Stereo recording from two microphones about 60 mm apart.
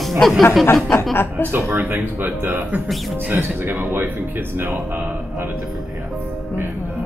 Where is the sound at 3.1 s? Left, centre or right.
Right.